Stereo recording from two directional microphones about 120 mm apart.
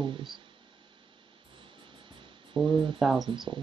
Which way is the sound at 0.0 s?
40° right (ahead or behind).